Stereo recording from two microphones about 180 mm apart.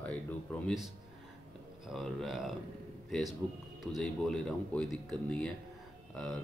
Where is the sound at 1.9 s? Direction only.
Centre (ahead or behind).